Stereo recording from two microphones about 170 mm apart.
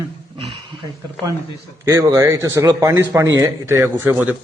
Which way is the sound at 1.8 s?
20° right (ahead or behind).